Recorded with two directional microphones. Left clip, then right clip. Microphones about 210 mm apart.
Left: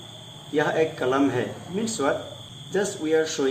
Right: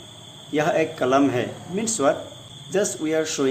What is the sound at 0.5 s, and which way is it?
Speech, 50° right (ahead or behind).